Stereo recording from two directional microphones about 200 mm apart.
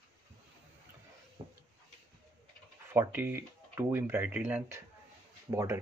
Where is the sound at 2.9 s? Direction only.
10° right (ahead or behind).